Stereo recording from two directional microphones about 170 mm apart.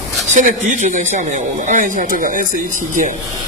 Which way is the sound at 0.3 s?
45° right (ahead or behind).